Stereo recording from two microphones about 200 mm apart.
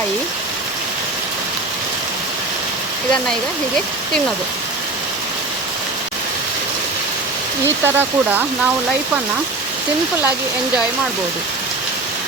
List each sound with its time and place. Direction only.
7.9 s speech: 10° right (ahead or behind)